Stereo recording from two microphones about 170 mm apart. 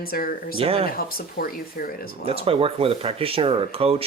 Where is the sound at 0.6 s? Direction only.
35° right (ahead or behind).